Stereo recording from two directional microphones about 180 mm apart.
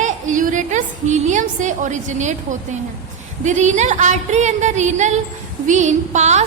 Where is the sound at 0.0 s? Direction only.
45° right (ahead or behind).